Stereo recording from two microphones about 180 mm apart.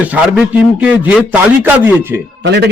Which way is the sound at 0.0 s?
10° right (ahead or behind).